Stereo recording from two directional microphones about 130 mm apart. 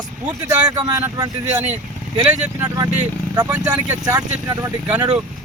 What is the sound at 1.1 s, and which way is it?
Speech, 30° right (ahead or behind).